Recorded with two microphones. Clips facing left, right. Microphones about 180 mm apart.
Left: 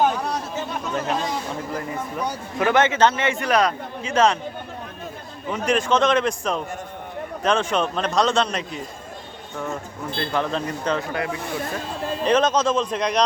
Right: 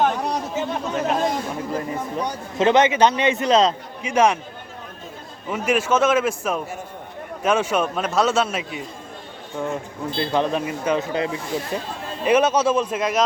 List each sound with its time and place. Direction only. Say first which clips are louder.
0.3 s chatter: right 3 dB; 5° right (ahead or behind)
1.7 s speech: right 4 dB; 20° right (ahead or behind)
5.5 s a man's voice: even; 5° right (ahead or behind)
10.2 s speech: right 3 dB; 20° right (ahead or behind)
11.0 s speech: right 3 dB; 20° right (ahead or behind)
12.2 s speech: right 2 dB; 10° right (ahead or behind)